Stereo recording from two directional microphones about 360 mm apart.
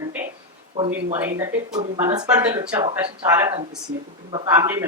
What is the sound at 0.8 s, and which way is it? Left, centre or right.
Speech, centre.